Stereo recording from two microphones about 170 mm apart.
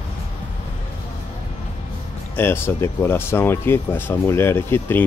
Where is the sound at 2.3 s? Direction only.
15° left (ahead or behind).